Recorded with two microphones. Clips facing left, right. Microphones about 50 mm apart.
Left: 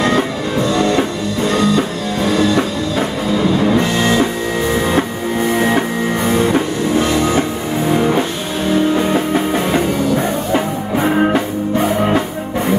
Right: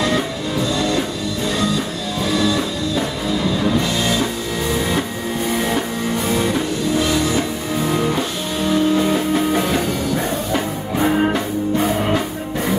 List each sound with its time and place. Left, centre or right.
1.5 s music: left
5.6 s music: left